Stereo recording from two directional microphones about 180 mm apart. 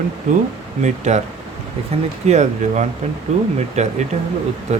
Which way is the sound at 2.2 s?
40° right (ahead or behind).